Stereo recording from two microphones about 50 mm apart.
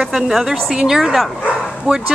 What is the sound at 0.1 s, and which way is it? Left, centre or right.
A woman's voice, centre.